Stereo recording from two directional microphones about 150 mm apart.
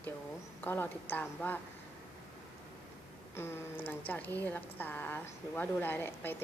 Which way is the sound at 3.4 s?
15° left (ahead or behind).